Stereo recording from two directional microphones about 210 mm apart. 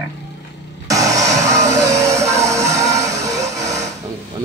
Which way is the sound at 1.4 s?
15° right (ahead or behind).